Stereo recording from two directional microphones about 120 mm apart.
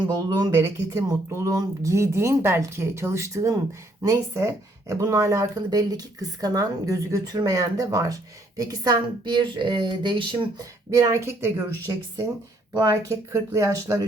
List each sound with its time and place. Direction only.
0.5 s speech: 25° right (ahead or behind); by 10.4 s 40° right (ahead or behind)
10.6 s speech: 30° right (ahead or behind)
12.7 s speech: 35° right (ahead or behind)